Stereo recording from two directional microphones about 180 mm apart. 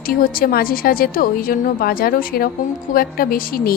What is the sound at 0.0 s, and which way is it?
A woman's voice, 55° left (ahead or behind).